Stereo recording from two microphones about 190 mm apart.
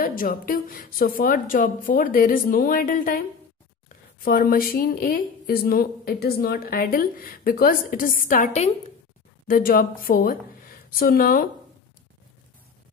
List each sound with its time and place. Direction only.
0.0 s a woman's voice: 45° left (ahead or behind)